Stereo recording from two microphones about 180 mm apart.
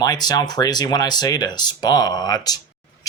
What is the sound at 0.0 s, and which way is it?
Speech, 20° left (ahead or behind).